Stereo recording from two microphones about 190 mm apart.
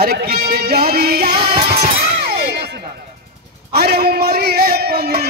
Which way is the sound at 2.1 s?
60° right (ahead or behind).